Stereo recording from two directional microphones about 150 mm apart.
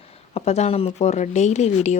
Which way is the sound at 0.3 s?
45° left (ahead or behind).